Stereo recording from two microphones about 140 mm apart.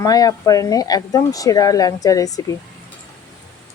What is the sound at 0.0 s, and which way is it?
Speech, 25° left (ahead or behind).